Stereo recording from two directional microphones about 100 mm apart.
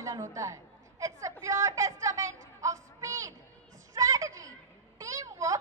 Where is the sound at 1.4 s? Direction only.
30° right (ahead or behind).